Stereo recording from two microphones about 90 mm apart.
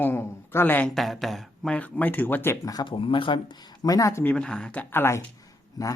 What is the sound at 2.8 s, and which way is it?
Speech, 75° left (ahead or behind).